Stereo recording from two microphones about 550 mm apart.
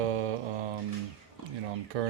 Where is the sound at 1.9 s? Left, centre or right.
Right.